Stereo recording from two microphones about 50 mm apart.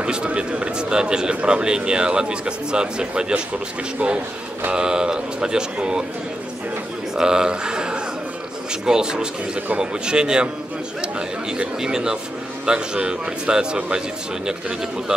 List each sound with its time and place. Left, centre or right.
0.0 s a man's voice: centre
7.2 s a man's voice: centre